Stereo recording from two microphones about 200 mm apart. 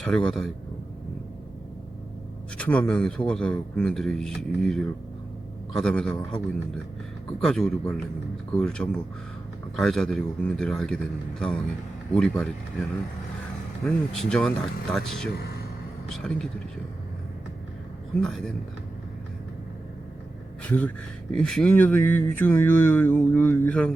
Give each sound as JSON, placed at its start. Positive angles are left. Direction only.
{"t": 0.0, "sound": "speech", "side_deg": 5}
{"t": 2.6, "sound": "speech", "side_deg": 5}
{"t": 7.4, "sound": "speech", "side_deg": 0}
{"t": 13.8, "sound": "speech", "side_deg": 5}
{"t": 15.4, "sound": "a sound", "side_deg": 50}
{"t": 16.0, "sound": "speech", "side_deg": 0}
{"t": 18.2, "sound": "speech", "side_deg": 0}
{"t": 20.7, "sound": "speech", "side_deg": 5}